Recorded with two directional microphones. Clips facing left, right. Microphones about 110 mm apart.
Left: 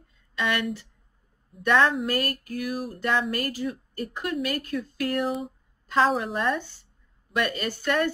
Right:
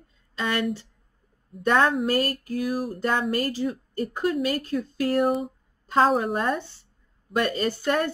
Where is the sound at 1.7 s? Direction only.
40° right (ahead or behind).